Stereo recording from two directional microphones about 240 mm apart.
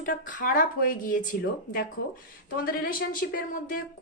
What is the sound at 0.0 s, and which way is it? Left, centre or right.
A woman's voice, left.